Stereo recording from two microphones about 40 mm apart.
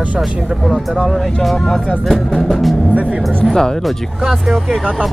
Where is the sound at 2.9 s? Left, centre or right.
Right.